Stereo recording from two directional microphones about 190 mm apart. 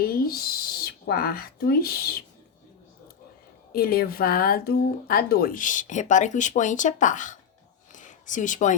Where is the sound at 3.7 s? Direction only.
50° left (ahead or behind).